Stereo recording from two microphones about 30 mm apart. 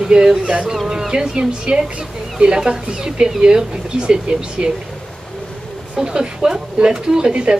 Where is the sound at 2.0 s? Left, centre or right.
Right.